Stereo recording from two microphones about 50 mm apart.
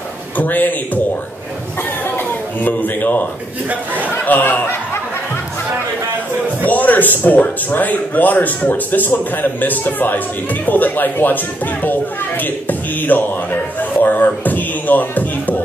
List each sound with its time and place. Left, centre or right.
0.4 s speech: left
2.0 s a sound: left
4.3 s speech: left
6.6 s speech: left